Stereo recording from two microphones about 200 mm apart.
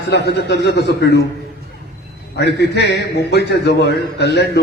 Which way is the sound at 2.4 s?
55° left (ahead or behind).